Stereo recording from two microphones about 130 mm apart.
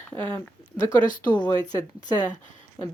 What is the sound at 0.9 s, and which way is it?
Speech, 35° left (ahead or behind).